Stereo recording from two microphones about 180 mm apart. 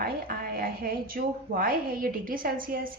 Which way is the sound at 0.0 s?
55° right (ahead or behind).